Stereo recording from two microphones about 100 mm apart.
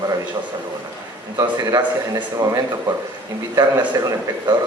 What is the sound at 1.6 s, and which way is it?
A man's voice, 35° right (ahead or behind).